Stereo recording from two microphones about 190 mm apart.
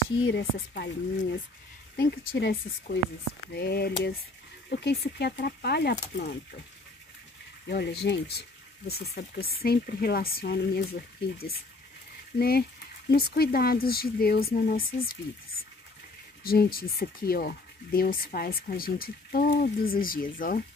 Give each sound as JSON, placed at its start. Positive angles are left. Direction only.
{"t": 0.4, "sound": "speech", "side_deg": 60}
{"t": 2.0, "sound": "speech", "side_deg": 60}
{"t": 7.6, "sound": "speech", "side_deg": 60}
{"t": 16.4, "sound": "speech", "side_deg": 50}